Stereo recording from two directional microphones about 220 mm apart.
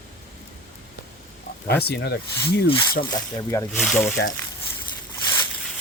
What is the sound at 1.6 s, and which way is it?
Speech, 45° left (ahead or behind).